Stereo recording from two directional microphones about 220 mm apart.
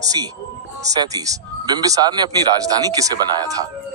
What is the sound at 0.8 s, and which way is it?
Speech, 15° right (ahead or behind).